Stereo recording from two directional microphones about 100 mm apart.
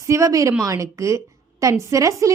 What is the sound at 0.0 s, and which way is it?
A woman's voice, 30° right (ahead or behind).